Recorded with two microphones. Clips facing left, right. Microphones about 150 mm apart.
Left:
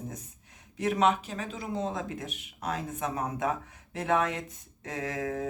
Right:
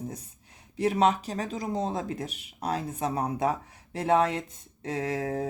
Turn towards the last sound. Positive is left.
turn(degrees=-30)  # may be behind; listen again after turning